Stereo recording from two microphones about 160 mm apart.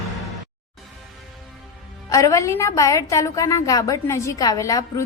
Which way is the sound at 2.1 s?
20° left (ahead or behind).